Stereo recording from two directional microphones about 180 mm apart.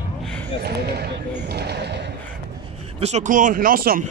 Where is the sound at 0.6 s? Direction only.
65° right (ahead or behind).